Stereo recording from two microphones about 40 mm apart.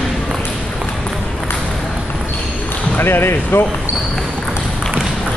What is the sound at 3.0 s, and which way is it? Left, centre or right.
Basketball bounce, left.